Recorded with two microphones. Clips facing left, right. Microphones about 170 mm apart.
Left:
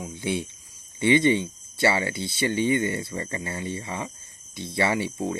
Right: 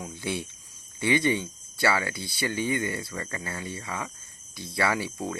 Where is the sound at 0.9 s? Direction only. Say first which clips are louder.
Left 5 dB; 20° left (ahead or behind).